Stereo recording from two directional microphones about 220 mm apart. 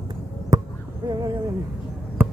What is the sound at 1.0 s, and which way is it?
Owl, 15° right (ahead or behind).